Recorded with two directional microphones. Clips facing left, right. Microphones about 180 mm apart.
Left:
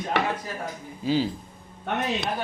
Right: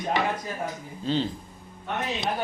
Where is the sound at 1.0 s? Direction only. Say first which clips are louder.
Left 2 dB; 5° left (ahead or behind).